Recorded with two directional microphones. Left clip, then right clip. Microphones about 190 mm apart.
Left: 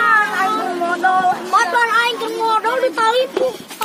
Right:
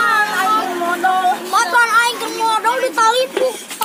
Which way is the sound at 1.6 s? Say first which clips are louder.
Right 2 dB; 15° left (ahead or behind).